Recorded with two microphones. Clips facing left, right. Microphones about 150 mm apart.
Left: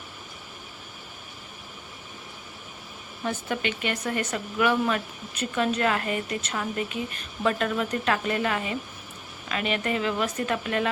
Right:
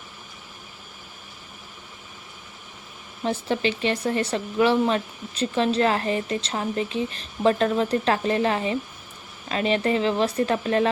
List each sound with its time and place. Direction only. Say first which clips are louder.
3.2 s speech: right 5 dB; 30° right (ahead or behind)